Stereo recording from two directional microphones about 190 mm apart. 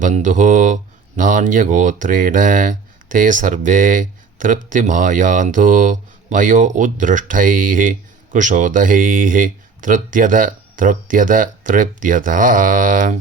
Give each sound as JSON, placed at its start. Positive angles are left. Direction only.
{"t": 0.0, "sound": "speech", "side_deg": -40}